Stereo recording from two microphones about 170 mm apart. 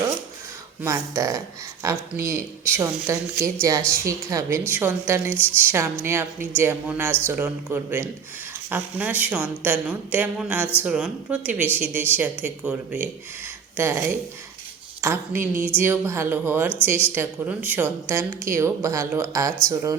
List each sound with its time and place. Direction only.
0.8 s speech: 15° right (ahead or behind)